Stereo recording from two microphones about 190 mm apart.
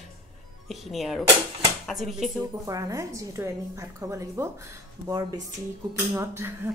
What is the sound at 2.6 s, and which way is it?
A woman's voice, 15° right (ahead or behind).